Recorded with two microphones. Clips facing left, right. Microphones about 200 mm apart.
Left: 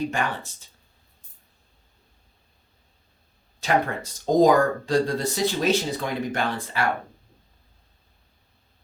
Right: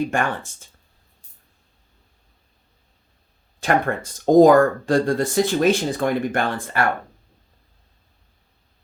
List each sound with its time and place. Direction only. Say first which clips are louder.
0.1 s speech: right 4 dB; 50° right (ahead or behind)
3.6 s speech: right 3 dB; 50° right (ahead or behind)